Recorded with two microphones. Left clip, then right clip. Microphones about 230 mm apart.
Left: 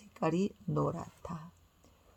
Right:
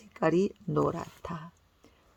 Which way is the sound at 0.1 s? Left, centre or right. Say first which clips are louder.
Right 7 dB; right.